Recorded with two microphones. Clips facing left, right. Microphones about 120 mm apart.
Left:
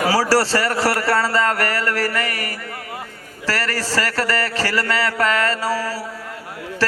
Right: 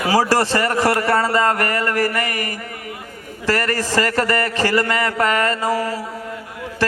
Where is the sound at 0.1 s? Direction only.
20° right (ahead or behind).